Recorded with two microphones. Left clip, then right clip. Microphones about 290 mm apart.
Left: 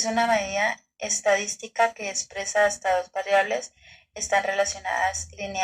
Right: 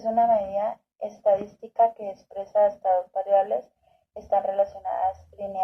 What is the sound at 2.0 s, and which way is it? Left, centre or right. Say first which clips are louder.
Speech: left 3 dB; left.